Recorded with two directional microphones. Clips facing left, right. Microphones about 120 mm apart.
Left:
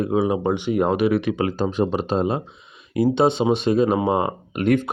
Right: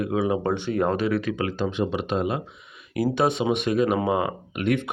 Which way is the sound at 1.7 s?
40° left (ahead or behind).